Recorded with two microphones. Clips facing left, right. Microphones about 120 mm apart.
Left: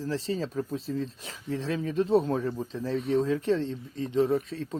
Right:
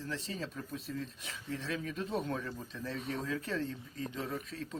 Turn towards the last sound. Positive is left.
turn(degrees=30)  # may be behind; listen again after turning